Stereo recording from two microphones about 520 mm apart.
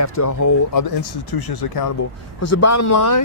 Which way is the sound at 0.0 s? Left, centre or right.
Left.